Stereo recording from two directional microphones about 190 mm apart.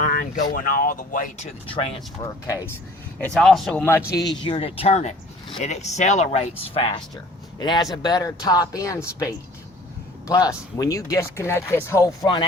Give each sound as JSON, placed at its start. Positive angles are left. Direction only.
{"t": 0.0, "sound": "a sound", "side_deg": 45}
{"t": 0.5, "sound": "speech", "side_deg": 50}
{"t": 1.6, "sound": "speech", "side_deg": 25}
{"t": 3.3, "sound": "a man's voice", "side_deg": 0}
{"t": 4.1, "sound": "speech", "side_deg": 20}